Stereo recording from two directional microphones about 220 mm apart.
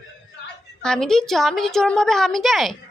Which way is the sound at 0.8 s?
5° left (ahead or behind).